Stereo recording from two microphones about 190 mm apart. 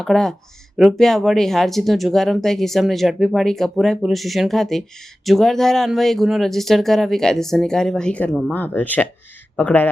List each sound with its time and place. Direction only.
0.0 s speech: centre (ahead or behind)